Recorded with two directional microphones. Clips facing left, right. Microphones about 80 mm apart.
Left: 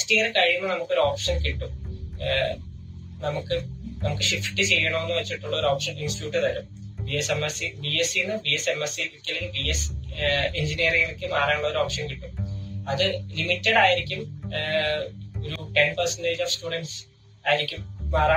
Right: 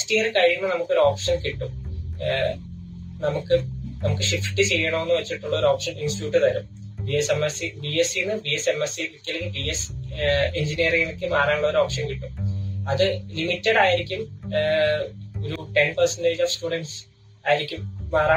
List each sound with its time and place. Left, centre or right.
0.0 s speech: right